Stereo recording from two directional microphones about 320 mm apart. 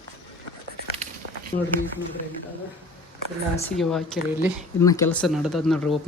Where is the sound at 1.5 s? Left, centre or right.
Left.